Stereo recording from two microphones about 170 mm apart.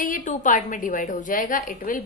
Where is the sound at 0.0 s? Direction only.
50° left (ahead or behind).